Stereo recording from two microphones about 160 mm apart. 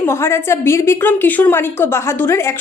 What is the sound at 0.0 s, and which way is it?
A woman's voice, 15° left (ahead or behind).